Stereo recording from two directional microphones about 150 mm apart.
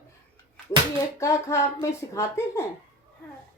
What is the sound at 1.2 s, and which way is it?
A woman's voice, 20° left (ahead or behind).